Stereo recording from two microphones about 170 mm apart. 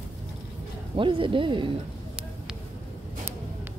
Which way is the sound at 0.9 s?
30° right (ahead or behind).